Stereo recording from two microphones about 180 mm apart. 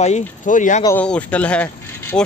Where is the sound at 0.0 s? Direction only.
40° left (ahead or behind).